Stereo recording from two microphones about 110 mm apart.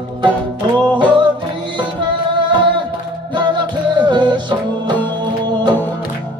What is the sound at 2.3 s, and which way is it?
Music, 45° right (ahead or behind).